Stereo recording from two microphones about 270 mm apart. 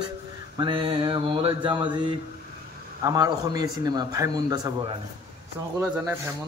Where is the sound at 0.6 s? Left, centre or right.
Centre.